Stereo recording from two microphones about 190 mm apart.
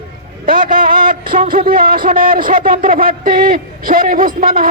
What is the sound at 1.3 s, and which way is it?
A man's voice, 50° right (ahead or behind).